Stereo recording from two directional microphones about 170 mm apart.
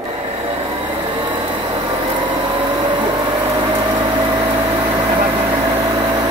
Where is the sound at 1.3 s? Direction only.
30° right (ahead or behind).